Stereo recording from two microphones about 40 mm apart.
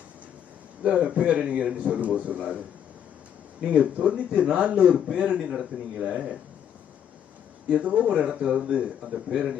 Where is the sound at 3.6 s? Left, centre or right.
Right.